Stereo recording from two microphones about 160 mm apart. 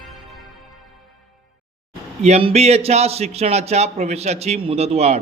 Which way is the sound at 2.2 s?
40° right (ahead or behind).